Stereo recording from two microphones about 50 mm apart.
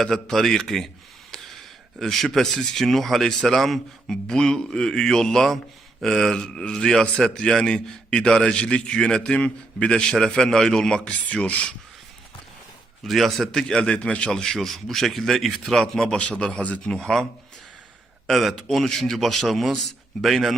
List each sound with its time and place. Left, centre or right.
0.0 s a man's voice: centre
1.3 s a sound: centre
2.0 s a man's voice: centre; by 11.7 s left
13.1 s a man's voice: centre
13.9 s a man's voice: left
14.3 s a man's voice: centre
16.1 s a man's voice: left
16.9 s a man's voice: centre
18.3 s a man's voice: centre